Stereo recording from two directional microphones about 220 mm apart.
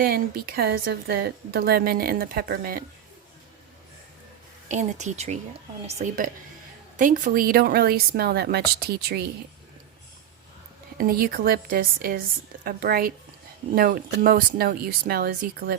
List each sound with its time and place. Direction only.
0.0 s a woman's voice: 45° right (ahead or behind)
4.7 s a woman's voice: 35° right (ahead or behind)
10.9 s a woman's voice: 40° right (ahead or behind)